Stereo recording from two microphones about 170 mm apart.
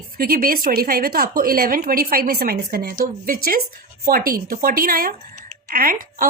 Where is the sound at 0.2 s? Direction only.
60° right (ahead or behind).